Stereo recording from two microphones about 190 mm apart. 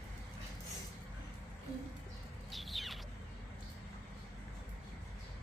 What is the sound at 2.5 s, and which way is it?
Bird, centre (ahead or behind).